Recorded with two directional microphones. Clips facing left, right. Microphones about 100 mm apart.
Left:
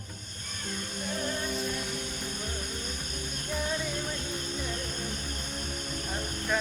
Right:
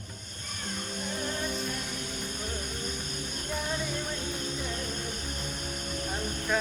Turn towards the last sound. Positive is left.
turn(degrees=0)  # may be behind; listen again after turning